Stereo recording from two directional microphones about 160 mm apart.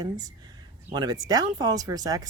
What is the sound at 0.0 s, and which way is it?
Speech, 25° right (ahead or behind).